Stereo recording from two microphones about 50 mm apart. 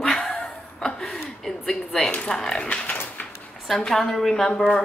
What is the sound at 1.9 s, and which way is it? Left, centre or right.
Speech, centre.